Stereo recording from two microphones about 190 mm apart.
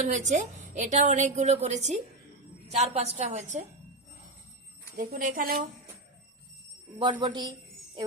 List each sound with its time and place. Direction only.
0.0 s a woman's voice: 40° right (ahead or behind)
4.9 s a woman's voice: 45° right (ahead or behind)
7.0 s speech: 25° right (ahead or behind)